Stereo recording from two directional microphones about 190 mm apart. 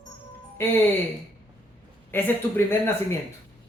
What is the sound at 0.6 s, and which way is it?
Speech, 10° left (ahead or behind).